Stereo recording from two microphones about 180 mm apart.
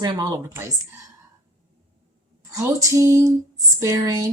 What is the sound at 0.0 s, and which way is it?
Speech, 20° right (ahead or behind).